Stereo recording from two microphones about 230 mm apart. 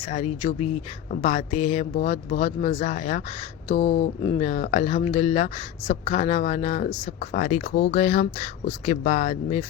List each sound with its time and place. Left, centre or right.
0.1 s speech: left
4.2 s speech: left